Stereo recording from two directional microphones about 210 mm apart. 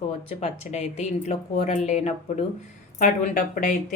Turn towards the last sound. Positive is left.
turn(degrees=40)  # may be behind; listen again after turning